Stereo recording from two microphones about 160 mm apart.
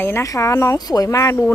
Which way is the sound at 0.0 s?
15° left (ahead or behind).